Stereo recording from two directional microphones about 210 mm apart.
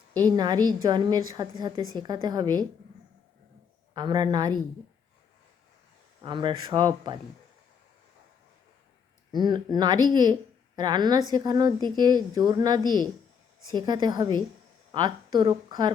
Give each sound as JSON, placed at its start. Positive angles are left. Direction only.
{"t": 0.2, "sound": "a woman's voice", "side_deg": -20}
{"t": 3.9, "sound": "a woman's voice", "side_deg": -20}
{"t": 6.2, "sound": "a woman's voice", "side_deg": -20}
{"t": 9.3, "sound": "a woman's voice", "side_deg": -20}